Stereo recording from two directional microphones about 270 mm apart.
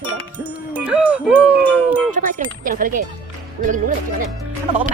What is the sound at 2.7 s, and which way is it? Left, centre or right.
Speech, right.